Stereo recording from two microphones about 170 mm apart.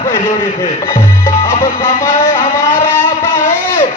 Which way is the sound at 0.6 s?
15° left (ahead or behind).